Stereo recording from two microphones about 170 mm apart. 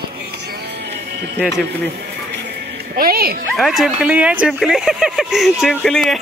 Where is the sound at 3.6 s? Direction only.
Centre (ahead or behind).